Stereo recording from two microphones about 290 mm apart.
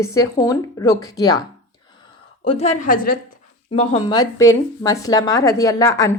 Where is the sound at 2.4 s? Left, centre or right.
Centre.